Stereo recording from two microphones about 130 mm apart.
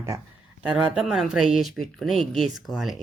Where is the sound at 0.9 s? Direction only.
Centre (ahead or behind).